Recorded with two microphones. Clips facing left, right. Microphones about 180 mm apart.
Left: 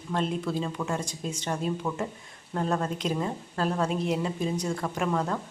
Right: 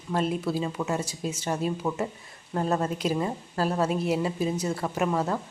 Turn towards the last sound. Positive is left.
turn(degrees=-5)  # may be behind; listen again after turning